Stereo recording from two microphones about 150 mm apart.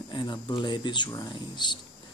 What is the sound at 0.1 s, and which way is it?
Speech, 30° left (ahead or behind).